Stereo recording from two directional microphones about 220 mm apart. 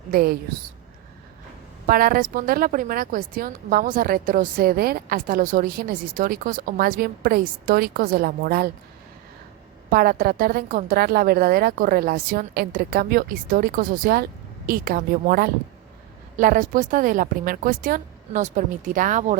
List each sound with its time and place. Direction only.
0.1 s a woman's voice: 45° right (ahead or behind)
1.9 s a woman's voice: 40° right (ahead or behind)
9.9 s a woman's voice: 40° right (ahead or behind)